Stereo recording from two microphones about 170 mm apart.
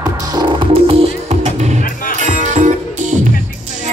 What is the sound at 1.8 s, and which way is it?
Music, 55° left (ahead or behind).